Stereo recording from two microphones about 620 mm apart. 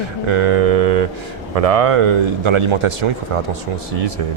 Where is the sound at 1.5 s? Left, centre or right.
Right.